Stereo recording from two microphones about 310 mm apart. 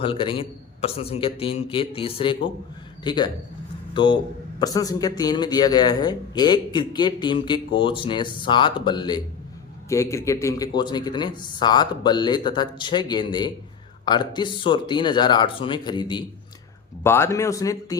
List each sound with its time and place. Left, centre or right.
0.0 s a man's voice: centre